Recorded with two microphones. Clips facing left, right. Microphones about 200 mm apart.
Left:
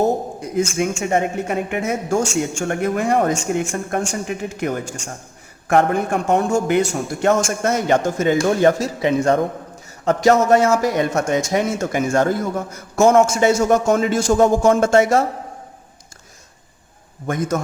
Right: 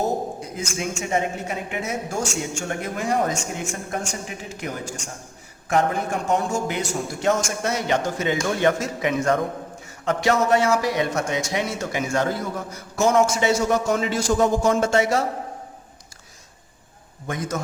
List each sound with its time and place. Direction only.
0.5 s a man's voice: 55° left (ahead or behind); by 9.4 s 30° left (ahead or behind)
10.1 s a man's voice: 40° left (ahead or behind)
17.2 s a man's voice: 50° left (ahead or behind)